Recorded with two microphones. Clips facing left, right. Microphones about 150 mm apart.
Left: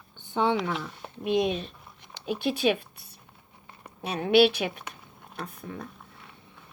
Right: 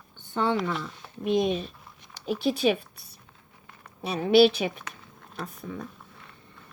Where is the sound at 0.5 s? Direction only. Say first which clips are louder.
Right 1 dB; 5° left (ahead or behind).